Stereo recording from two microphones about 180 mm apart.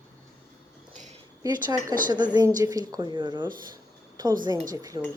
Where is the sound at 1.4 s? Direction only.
25° right (ahead or behind).